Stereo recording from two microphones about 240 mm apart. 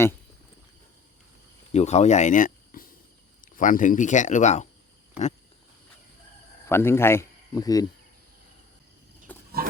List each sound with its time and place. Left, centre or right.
1.7 s speech: left
6.7 s speech: centre
9.3 s wild animals: centre